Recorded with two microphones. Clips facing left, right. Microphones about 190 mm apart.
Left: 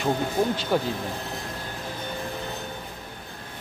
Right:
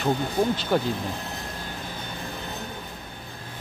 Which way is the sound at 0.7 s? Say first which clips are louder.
Even; 5° left (ahead or behind).